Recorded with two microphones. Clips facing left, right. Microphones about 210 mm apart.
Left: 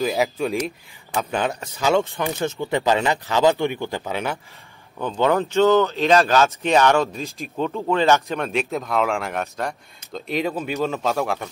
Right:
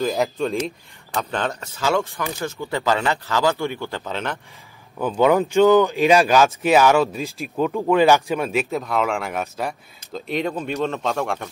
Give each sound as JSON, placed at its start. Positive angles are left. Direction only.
{"t": 0.0, "sound": "speech", "side_deg": 5}
{"t": 4.9, "sound": "speech", "side_deg": -5}